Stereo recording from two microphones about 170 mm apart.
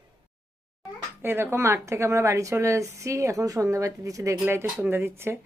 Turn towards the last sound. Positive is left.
turn(degrees=-15)  # may be behind; listen again after turning